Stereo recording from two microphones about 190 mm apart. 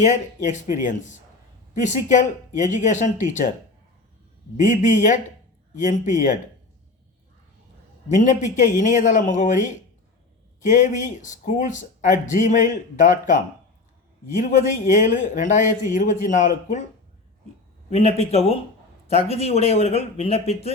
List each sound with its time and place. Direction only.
0.0 s speech: 40° left (ahead or behind)
4.6 s speech: 40° left (ahead or behind)
8.1 s speech: 40° left (ahead or behind)
17.9 s speech: 35° left (ahead or behind)